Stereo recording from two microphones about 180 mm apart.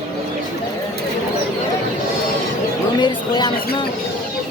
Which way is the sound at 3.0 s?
25° left (ahead or behind).